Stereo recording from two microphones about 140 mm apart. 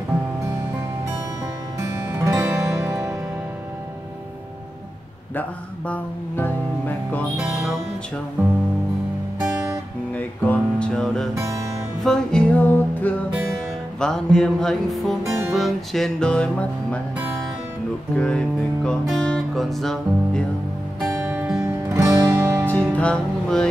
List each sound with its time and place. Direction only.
1.8 s music: 20° right (ahead or behind)
5.9 s music: 15° left (ahead or behind)
7.4 s music: 5° right (ahead or behind)
10.1 s music: 10° left (ahead or behind)
18.1 s music: 10° left (ahead or behind)
21.2 s music: 10° right (ahead or behind)
22.7 s music: 10° left (ahead or behind)